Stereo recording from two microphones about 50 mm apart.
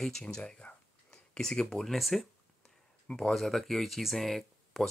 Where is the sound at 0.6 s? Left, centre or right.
Left.